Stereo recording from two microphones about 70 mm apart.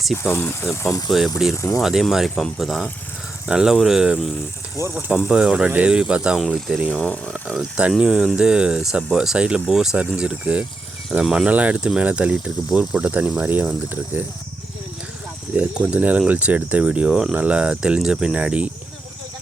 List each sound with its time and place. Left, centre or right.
0.2 s speech: left
1.1 s speech: centre
1.5 s speech: left
1.8 s speech: centre
3.4 s speech: centre
4.8 s speech: right
5.1 s speech: centre
6.9 s speech: centre
7.4 s speech: centre
11.4 s speech: centre
13.0 s speech: right
15.5 s speech: centre